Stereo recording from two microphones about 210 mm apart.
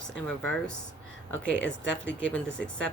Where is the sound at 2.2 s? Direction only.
5° left (ahead or behind).